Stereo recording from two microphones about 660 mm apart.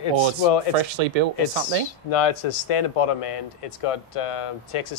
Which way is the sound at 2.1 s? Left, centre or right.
Left.